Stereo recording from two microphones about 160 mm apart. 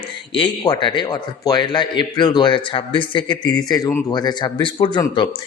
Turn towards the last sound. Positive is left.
turn(degrees=30)  # may be behind; listen again after turning